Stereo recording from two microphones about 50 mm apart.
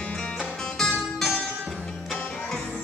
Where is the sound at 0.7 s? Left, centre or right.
Centre.